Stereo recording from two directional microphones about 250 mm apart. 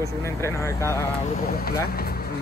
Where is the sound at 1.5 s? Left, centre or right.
Left.